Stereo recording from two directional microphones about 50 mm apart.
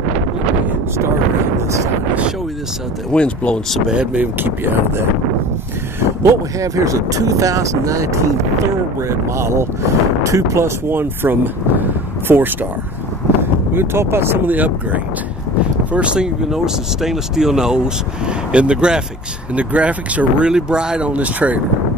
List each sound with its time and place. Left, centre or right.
3.1 s speech: left
3.9 s speech: right
4.4 s speech: right
6.2 s speech: right
9.1 s speech: right
10.2 s speech: right
10.9 s speech: right
13.4 s speech: right
14.4 s speech: right
15.9 s speech: right
16.4 s speech: centre
19.5 s speech: right
20.4 s speech: centre
21.1 s speech: right